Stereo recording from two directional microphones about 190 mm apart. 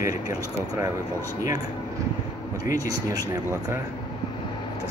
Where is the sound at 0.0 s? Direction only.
20° right (ahead or behind).